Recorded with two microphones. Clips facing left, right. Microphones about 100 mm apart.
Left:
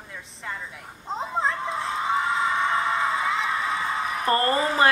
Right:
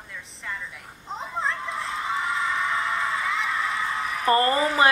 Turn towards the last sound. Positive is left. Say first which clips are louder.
# right 1 dB
turn(degrees=25)  # may be behind; listen again after turning